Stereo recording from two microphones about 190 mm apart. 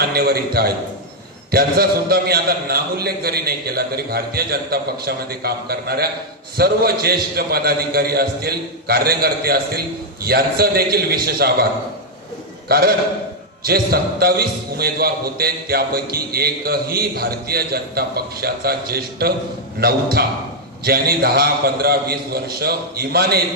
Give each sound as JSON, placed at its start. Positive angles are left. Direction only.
{"t": 0.1, "sound": "a man's voice", "side_deg": -55}